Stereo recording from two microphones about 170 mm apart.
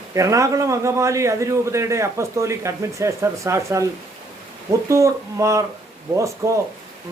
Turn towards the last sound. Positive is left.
turn(degrees=-15)  # may be behind; listen again after turning